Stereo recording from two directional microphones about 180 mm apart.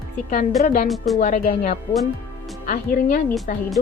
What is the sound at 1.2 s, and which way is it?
Speech, 45° left (ahead or behind).